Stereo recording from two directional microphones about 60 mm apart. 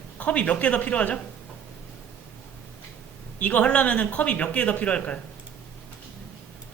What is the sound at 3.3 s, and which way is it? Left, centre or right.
Speech, left.